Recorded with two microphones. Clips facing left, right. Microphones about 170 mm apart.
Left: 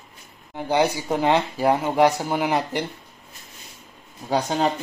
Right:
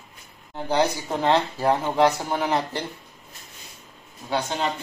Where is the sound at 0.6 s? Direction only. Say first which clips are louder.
Left 2 dB; 10° left (ahead or behind).